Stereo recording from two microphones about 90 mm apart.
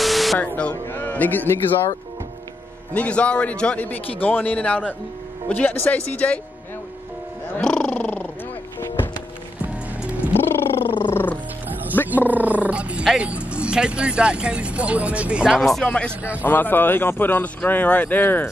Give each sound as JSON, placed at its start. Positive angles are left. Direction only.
{"t": 0.0, "sound": "a sound", "side_deg": 0}
{"t": 0.8, "sound": "a man's voice", "side_deg": 20}
{"t": 2.9, "sound": "a man's voice", "side_deg": 15}
{"t": 7.5, "sound": "a sound", "side_deg": 10}
{"t": 8.7, "sound": "music", "side_deg": 25}
{"t": 10.0, "sound": "music", "side_deg": -15}
{"t": 10.3, "sound": "purr", "side_deg": 25}
{"t": 11.1, "sound": "music", "side_deg": 25}
{"t": 11.9, "sound": "roaring cats", "side_deg": 25}
{"t": 12.3, "sound": "roar", "side_deg": -15}
{"t": 13.2, "sound": "speech", "side_deg": -15}
{"t": 15.6, "sound": "a man's voice", "side_deg": 5}
{"t": 16.2, "sound": "speech", "side_deg": -15}
{"t": 16.4, "sound": "a man's voice", "side_deg": 25}